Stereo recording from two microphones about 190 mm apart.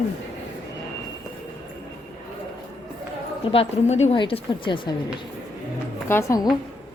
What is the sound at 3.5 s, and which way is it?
A woman's voice, 35° left (ahead or behind).